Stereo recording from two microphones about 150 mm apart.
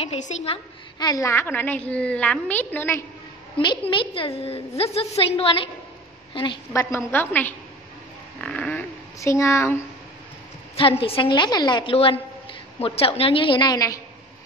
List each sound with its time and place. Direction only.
0.0 s a woman's voice: 40° left (ahead or behind)
0.9 s a woman's voice: 25° left (ahead or behind)
3.5 s a woman's voice: 35° left (ahead or behind)
6.7 s a woman's voice: 20° left (ahead or behind)
8.4 s a sound: 5° left (ahead or behind)
9.2 s speech: 20° left (ahead or behind)
10.8 s a woman's voice: 40° left (ahead or behind); by 14.0 s 20° left (ahead or behind)